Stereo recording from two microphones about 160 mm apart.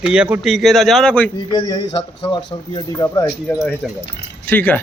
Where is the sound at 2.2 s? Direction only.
30° left (ahead or behind); by 4.8 s 10° left (ahead or behind).